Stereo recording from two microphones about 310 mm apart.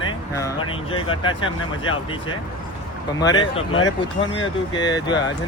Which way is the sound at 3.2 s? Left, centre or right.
Centre.